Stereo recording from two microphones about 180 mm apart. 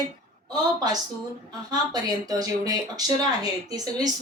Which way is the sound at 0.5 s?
20° right (ahead or behind).